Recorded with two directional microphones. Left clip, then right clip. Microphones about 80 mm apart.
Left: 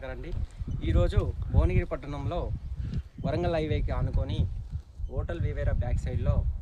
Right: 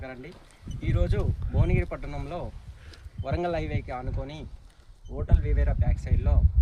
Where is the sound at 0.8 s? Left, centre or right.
Left.